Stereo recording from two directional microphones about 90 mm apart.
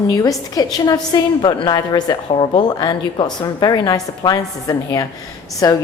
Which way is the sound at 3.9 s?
40° left (ahead or behind).